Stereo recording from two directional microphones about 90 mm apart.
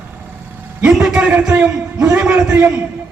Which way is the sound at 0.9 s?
5° right (ahead or behind).